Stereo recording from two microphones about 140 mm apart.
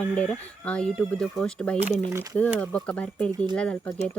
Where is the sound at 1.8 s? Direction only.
20° right (ahead or behind).